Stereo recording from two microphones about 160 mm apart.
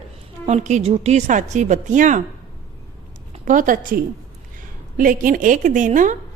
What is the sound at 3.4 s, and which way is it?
A woman's voice, 55° right (ahead or behind).